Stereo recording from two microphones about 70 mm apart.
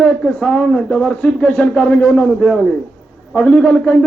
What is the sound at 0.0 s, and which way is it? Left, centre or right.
Speech, centre.